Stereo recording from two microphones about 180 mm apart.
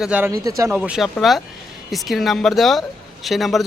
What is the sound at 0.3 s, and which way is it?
Speech, 15° right (ahead or behind).